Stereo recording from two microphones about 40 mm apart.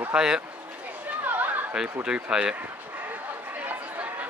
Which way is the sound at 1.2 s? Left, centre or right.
Right.